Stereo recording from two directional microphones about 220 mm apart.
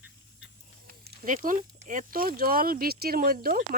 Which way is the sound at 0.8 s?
40° right (ahead or behind).